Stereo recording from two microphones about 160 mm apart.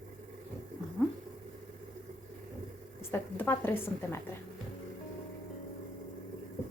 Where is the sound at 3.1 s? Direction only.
15° left (ahead or behind).